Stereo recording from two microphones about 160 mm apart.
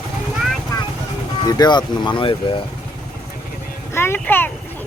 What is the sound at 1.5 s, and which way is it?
Speech, 25° left (ahead or behind).